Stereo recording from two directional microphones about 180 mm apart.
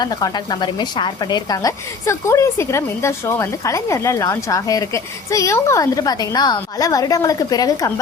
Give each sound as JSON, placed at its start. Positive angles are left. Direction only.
{"t": 0.0, "sound": "a woman's voice", "side_deg": 20}